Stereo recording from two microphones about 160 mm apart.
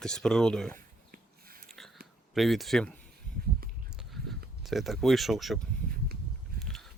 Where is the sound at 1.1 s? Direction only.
65° right (ahead or behind).